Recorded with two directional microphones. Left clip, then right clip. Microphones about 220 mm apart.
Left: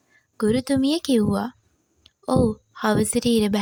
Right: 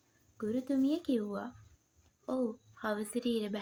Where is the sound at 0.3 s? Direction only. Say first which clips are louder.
Left 12 dB; 50° left (ahead or behind).